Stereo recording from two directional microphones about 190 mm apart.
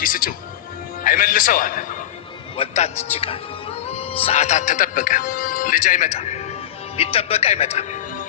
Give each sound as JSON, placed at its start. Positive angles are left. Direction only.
{"t": 0.0, "sound": "a man's voice", "side_deg": 50}